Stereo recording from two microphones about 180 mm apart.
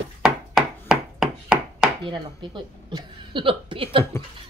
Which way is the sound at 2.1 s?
25° right (ahead or behind).